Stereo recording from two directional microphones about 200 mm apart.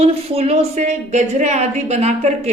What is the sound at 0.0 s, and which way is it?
Speech, 30° right (ahead or behind).